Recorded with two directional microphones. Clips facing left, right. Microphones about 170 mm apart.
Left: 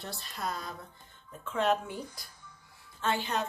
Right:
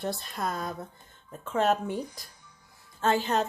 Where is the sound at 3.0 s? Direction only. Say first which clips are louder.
Right 6 dB; 45° right (ahead or behind).